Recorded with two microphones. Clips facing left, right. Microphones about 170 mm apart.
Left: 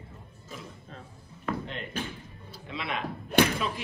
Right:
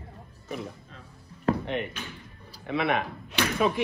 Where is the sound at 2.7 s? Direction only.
60° right (ahead or behind).